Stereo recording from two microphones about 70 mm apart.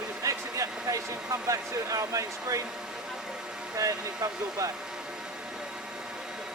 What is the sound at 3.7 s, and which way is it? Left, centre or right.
Speech, right.